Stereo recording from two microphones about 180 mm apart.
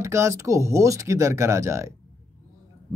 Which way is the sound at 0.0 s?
15° right (ahead or behind).